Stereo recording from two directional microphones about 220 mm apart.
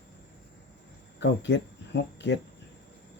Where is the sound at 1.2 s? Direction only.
50° left (ahead or behind).